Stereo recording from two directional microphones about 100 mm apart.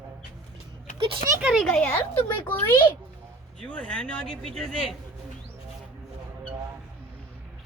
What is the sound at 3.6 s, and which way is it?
Speech, 10° left (ahead or behind).